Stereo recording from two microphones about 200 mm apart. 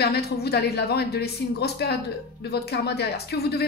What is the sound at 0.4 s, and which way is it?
A woman's voice, 55° left (ahead or behind).